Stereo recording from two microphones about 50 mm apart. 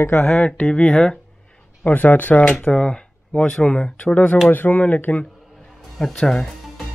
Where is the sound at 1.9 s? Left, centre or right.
Left.